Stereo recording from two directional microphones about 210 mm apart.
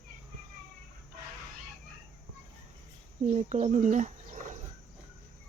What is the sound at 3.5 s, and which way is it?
Speech, 35° right (ahead or behind).